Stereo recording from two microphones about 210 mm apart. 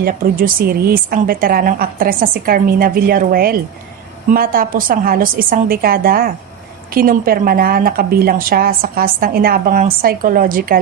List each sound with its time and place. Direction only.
0.0 s a woman's voice: 45° right (ahead or behind)